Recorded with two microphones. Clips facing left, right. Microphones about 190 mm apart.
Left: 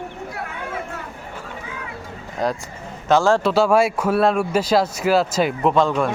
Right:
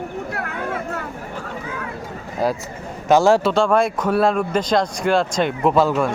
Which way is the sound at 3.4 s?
5° left (ahead or behind).